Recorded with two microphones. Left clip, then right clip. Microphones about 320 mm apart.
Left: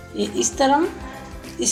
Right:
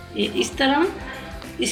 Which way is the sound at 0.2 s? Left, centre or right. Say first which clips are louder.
Left 1 dB; left.